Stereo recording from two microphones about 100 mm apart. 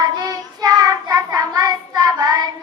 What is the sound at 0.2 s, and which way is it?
Child singing, 40° right (ahead or behind).